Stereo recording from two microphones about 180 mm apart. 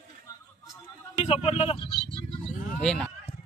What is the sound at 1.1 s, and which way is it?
Speech, 35° left (ahead or behind).